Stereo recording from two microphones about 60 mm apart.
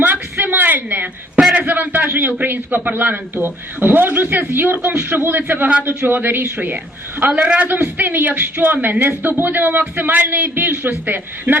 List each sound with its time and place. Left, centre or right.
0.0 s a sound: right
1.5 s a man's voice: right
7.3 s a man's voice: centre